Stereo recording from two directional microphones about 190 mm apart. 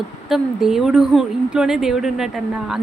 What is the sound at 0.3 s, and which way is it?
A woman's voice, centre (ahead or behind).